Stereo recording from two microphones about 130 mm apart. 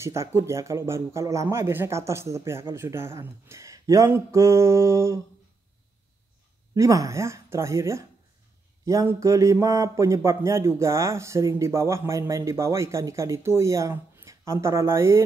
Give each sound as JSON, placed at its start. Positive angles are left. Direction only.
{"t": 0.0, "sound": "speech", "side_deg": -20}
{"t": 6.7, "sound": "speech", "side_deg": -25}